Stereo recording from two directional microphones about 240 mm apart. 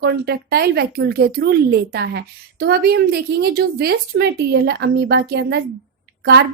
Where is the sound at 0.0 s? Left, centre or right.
Right.